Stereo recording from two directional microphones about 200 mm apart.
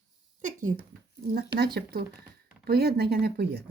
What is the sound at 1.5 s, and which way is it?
Speech, 50° right (ahead or behind).